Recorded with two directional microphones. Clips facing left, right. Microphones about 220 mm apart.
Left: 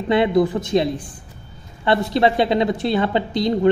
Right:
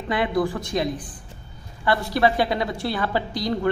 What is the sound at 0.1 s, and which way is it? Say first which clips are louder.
A woman's voice: left 6 dB; 25° left (ahead or behind).